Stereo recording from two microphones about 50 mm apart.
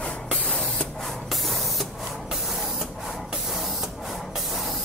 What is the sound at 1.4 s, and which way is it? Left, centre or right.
Printer, centre.